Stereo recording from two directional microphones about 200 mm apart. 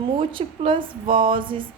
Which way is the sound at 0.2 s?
25° right (ahead or behind).